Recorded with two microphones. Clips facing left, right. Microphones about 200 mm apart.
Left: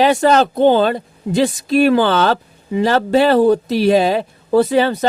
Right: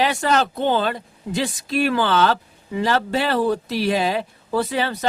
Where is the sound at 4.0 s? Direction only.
30° left (ahead or behind).